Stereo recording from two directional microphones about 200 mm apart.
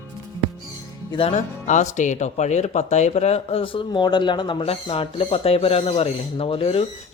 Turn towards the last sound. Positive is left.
turn(degrees=30)  # may be behind; listen again after turning